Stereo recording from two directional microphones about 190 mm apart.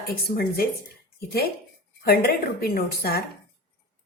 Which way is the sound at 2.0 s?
55° left (ahead or behind).